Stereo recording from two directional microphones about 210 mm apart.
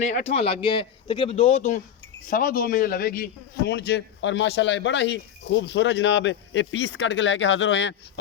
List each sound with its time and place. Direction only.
0.0 s a man's voice: 35° left (ahead or behind); by 8.2 s 60° left (ahead or behind)